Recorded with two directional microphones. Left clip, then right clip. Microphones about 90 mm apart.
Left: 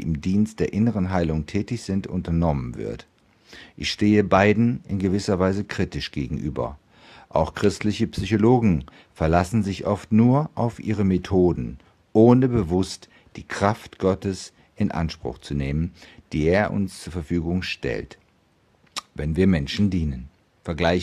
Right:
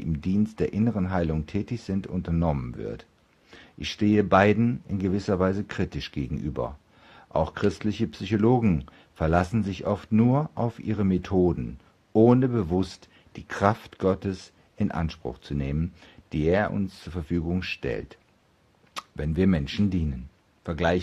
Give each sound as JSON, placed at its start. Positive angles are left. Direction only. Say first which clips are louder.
{"t": 0.0, "sound": "speech", "louder": "left 3 dB", "side_deg": 30}